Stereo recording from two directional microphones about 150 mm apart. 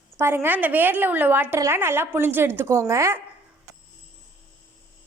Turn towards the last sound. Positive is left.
turn(degrees=-20)  # may be behind; listen again after turning